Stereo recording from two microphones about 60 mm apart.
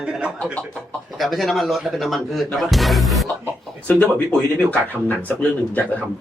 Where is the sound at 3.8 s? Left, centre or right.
Left.